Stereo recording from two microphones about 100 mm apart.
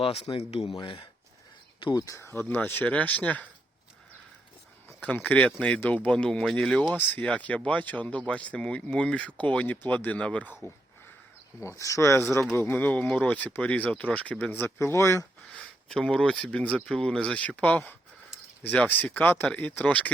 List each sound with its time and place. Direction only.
0.0 s speech: 75° left (ahead or behind)
0.8 s speech: 45° left (ahead or behind)
2.0 s speech: 30° left (ahead or behind); by 3.4 s 15° left (ahead or behind)
4.9 s speech: 15° left (ahead or behind)
6.9 s speech: 15° left (ahead or behind)
11.6 s speech: 30° left (ahead or behind)
15.5 s speech: 10° left (ahead or behind)